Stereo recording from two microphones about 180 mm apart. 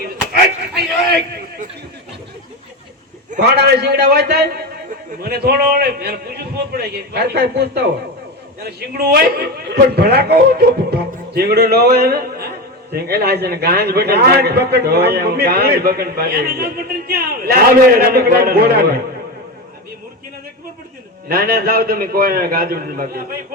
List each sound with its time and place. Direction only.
3.6 s a man's voice: 65° right (ahead or behind)
21.2 s a man's voice: 60° right (ahead or behind)